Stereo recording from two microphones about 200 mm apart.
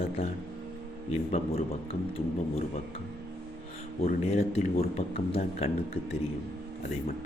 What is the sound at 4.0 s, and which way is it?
A man's voice, 30° left (ahead or behind).